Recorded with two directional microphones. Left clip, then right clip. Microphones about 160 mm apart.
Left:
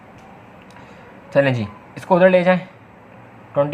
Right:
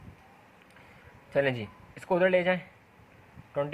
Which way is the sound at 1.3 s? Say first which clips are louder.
Left 10 dB; 35° right (ahead or behind).